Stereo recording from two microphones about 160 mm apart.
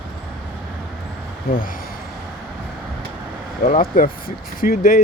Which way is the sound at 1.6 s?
60° left (ahead or behind).